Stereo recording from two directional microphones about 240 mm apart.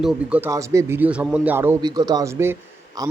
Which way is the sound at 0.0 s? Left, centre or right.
Centre.